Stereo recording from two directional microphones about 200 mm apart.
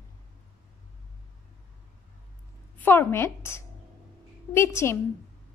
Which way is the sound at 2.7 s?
10° left (ahead or behind).